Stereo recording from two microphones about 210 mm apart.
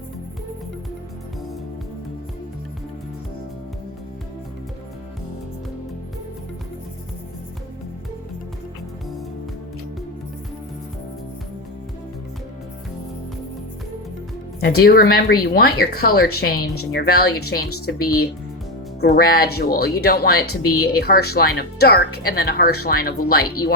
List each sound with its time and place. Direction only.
14.6 s speech: 45° left (ahead or behind)